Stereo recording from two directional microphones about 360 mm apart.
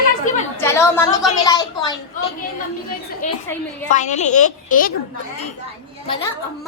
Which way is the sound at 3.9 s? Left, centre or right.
Centre.